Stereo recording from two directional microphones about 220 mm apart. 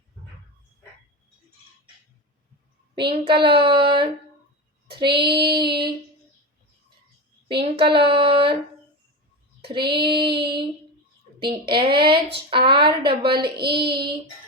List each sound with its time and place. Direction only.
2.9 s a child's voice: 20° right (ahead or behind)
7.4 s a child's voice: 25° right (ahead or behind)
9.6 s female singing: 25° right (ahead or behind)
9.9 s a child's voice: 20° right (ahead or behind)